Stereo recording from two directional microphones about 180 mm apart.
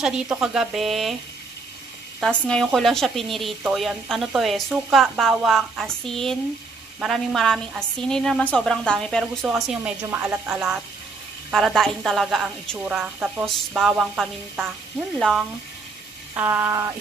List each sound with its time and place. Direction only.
0.0 s a woman's voice: 5° right (ahead or behind)
2.1 s a woman's voice: 5° left (ahead or behind)
16.3 s speech: 15° right (ahead or behind)